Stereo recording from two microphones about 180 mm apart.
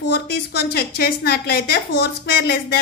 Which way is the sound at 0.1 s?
65° left (ahead or behind).